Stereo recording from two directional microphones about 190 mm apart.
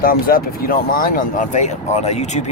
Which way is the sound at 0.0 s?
50° left (ahead or behind).